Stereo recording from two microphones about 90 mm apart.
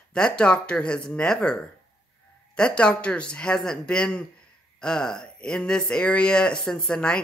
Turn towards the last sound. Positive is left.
turn(degrees=10)  # may be behind; listen again after turning